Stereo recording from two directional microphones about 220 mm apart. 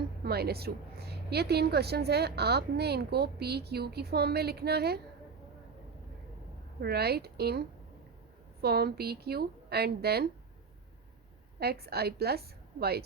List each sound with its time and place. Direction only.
0.3 s a woman's voice: 45° right (ahead or behind)
6.7 s a woman's voice: 45° right (ahead or behind)
8.6 s a woman's voice: 45° right (ahead or behind)
11.6 s a woman's voice: 45° right (ahead or behind)